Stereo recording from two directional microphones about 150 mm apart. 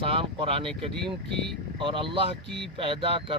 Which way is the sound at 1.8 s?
35° right (ahead or behind).